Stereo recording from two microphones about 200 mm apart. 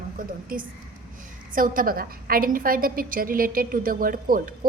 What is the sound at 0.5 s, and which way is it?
A woman's voice, 45° right (ahead or behind).